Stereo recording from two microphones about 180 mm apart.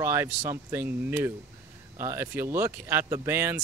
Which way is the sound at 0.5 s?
15° right (ahead or behind).